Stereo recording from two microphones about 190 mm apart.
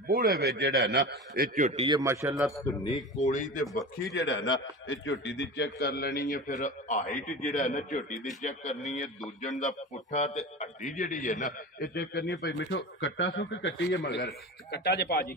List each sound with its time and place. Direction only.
0.1 s a man's voice: 55° right (ahead or behind)
1.7 s a man's voice: 30° right (ahead or behind)
2.0 s a man's voice: 15° right (ahead or behind)
2.3 s a man's voice: centre (ahead or behind)
3.2 s a man's voice: 40° left (ahead or behind)
4.0 s a man's voice: 60° left (ahead or behind)